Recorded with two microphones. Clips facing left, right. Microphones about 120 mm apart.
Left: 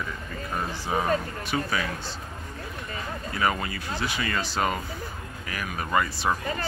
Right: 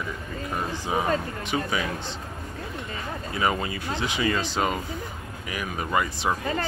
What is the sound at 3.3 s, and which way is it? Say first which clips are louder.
Speech: right 1 dB; 20° right (ahead or behind).